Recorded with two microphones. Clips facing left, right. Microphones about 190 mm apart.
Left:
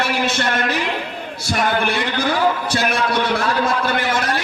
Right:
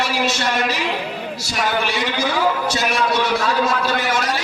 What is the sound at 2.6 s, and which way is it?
A man's voice, 55° left (ahead or behind).